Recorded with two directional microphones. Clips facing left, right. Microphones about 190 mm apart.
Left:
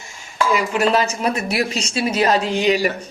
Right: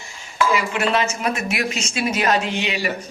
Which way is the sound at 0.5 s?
40° left (ahead or behind).